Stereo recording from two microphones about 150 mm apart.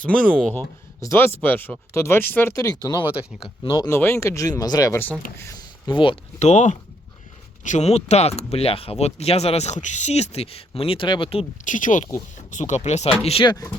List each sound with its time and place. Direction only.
0.1 s speech: 5° left (ahead or behind)
1.0 s speech: 15° left (ahead or behind); by 6.1 s 30° left (ahead or behind)
6.4 s speech: 50° left (ahead or behind)
11.6 s speech: 60° left (ahead or behind); by 13.7 s 30° left (ahead or behind)